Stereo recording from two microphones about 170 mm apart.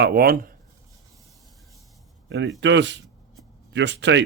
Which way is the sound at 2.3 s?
90° right.